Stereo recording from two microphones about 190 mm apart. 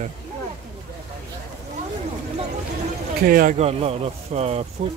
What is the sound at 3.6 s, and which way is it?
Speech, 30° right (ahead or behind).